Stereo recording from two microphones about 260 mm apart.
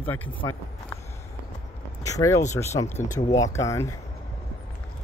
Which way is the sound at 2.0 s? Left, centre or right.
Centre.